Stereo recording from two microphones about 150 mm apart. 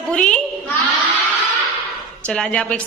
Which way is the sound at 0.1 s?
5° left (ahead or behind).